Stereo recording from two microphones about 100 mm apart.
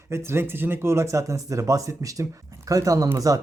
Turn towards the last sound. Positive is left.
turn(degrees=-35)  # may be behind; listen again after turning